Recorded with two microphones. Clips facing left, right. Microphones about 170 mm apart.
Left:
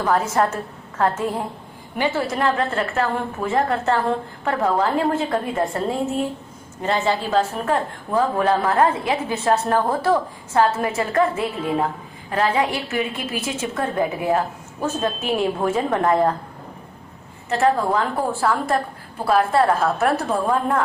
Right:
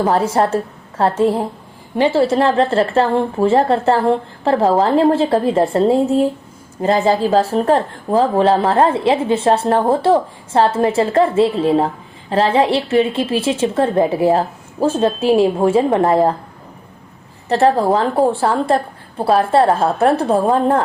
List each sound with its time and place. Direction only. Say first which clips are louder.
0.0 s a woman's voice: right 4 dB; 30° right (ahead or behind)
17.5 s a woman's voice: right 5 dB; 35° right (ahead or behind)